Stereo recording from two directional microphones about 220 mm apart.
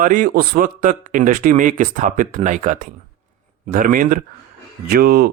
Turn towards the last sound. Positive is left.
turn(degrees=-45)  # may be behind; listen again after turning